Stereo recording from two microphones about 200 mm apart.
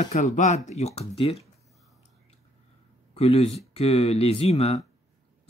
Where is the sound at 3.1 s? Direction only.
30° left (ahead or behind).